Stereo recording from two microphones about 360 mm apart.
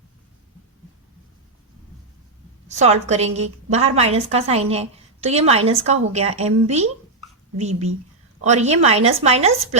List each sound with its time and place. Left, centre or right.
2.6 s a woman's voice: centre